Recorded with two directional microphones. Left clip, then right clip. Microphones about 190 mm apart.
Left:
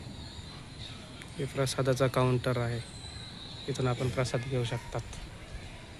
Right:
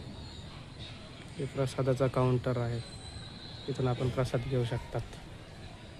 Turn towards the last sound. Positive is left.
turn(degrees=-20)  # may be behind; listen again after turning